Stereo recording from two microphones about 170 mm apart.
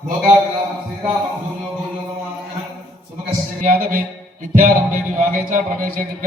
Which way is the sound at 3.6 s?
55° right (ahead or behind).